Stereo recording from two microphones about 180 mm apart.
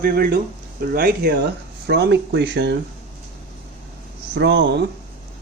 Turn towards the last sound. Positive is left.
turn(degrees=-70)  # may be behind; listen again after turning